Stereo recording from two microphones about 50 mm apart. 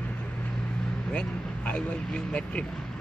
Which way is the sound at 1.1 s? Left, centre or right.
Left.